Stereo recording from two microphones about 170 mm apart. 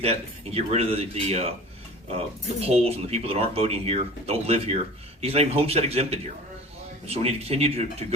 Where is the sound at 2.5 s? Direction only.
35° right (ahead or behind).